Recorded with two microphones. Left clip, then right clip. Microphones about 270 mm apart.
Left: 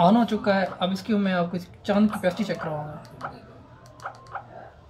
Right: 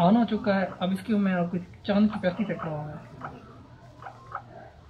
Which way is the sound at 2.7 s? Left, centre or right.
Left.